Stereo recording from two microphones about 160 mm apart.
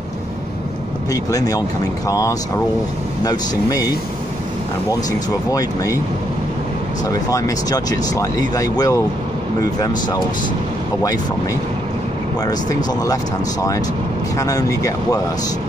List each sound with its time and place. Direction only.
1.1 s speech: 20° left (ahead or behind)
5.5 s speech: 20° left (ahead or behind)
7.2 s speech: 20° left (ahead or behind)
12.4 s speech: 25° left (ahead or behind)
14.3 s speech: 20° left (ahead or behind)